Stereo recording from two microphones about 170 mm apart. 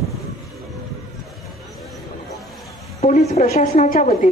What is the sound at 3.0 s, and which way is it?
A woman's voice, 40° left (ahead or behind).